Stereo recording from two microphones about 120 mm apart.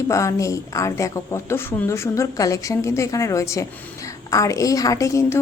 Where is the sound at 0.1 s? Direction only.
25° left (ahead or behind).